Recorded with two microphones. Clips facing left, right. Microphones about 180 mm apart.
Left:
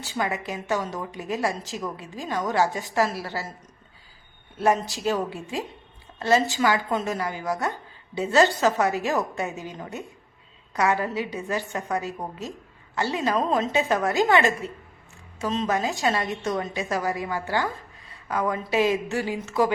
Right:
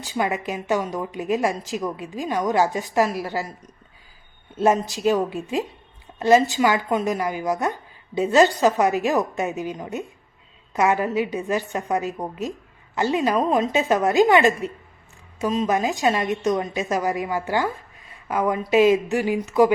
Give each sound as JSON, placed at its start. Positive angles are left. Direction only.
{"t": 0.0, "sound": "speech", "side_deg": -20}
{"t": 4.5, "sound": "a woman's voice", "side_deg": -20}